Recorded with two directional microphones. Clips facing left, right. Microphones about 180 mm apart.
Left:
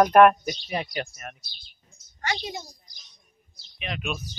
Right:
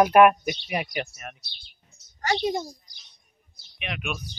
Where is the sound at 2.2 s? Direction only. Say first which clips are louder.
Right 7 dB; 50° right (ahead or behind).